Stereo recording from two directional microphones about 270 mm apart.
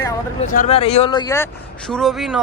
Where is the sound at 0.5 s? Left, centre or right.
Left.